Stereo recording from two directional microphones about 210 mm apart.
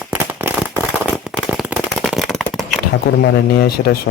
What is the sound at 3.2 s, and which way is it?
Speech, 50° left (ahead or behind).